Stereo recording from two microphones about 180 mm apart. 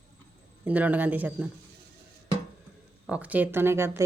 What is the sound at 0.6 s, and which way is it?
Speech, 10° right (ahead or behind).